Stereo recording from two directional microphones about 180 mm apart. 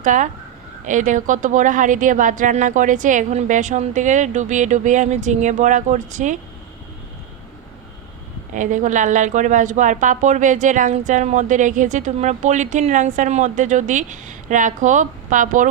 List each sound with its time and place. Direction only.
0.0 s a woman's voice: 45° right (ahead or behind)
8.5 s a woman's voice: 45° right (ahead or behind)